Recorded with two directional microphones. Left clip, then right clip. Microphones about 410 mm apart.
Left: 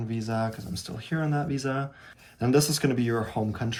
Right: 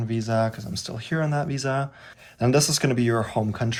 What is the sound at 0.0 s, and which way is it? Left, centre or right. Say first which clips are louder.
Speech: right 6 dB; centre.